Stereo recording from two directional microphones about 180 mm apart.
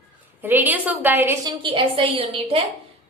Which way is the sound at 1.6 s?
30° right (ahead or behind).